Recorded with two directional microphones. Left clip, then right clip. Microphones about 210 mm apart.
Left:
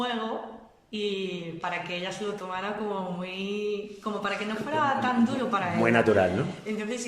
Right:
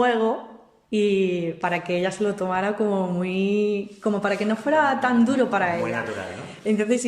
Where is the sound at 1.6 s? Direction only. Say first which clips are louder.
Right 6 dB; 40° right (ahead or behind).